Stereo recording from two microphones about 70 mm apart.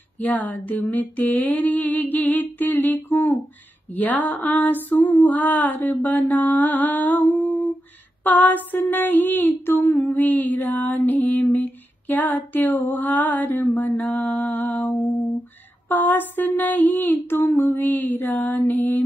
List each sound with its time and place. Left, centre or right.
0.2 s humming: left